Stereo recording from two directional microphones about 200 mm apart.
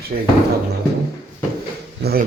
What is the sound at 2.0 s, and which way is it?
Speech, 50° right (ahead or behind).